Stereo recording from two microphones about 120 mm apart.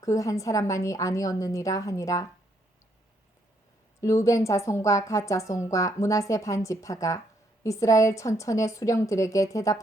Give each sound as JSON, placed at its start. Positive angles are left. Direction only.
{"t": 0.0, "sound": "a woman's voice", "side_deg": 25}
{"t": 4.0, "sound": "a woman's voice", "side_deg": 25}